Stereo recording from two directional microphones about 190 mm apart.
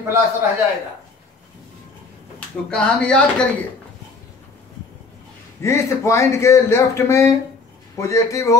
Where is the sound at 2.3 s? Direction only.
5° left (ahead or behind).